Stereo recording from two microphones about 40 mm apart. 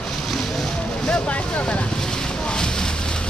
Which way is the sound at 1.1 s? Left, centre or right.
Left.